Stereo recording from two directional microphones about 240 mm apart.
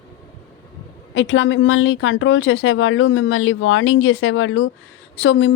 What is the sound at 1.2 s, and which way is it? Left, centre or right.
A woman's voice, left.